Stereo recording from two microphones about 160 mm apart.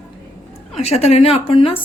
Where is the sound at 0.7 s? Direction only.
40° left (ahead or behind).